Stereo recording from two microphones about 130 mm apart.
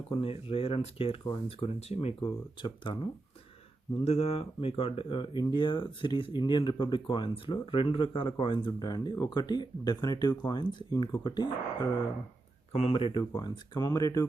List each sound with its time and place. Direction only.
0.1 s speech: 45° left (ahead or behind)
4.0 s speech: 50° left (ahead or behind); by 11.9 s 35° left (ahead or behind)
12.7 s speech: 50° left (ahead or behind); by 14.3 s 25° left (ahead or behind)